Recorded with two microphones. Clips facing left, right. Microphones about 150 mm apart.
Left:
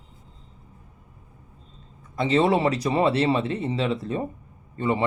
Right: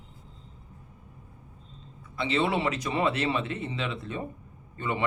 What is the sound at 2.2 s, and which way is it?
Speech, 40° left (ahead or behind).